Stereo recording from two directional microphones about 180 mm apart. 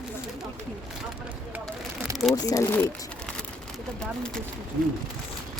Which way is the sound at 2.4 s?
20° left (ahead or behind).